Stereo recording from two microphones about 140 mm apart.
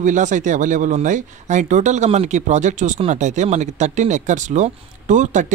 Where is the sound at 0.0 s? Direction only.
65° right (ahead or behind).